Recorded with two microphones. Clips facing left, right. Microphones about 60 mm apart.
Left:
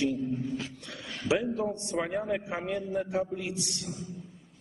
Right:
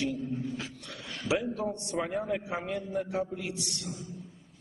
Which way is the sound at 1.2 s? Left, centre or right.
Left.